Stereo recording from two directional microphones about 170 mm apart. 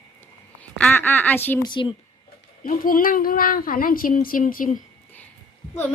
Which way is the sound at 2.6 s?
55° left (ahead or behind).